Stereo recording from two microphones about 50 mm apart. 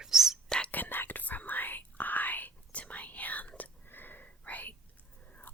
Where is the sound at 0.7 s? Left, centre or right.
Left.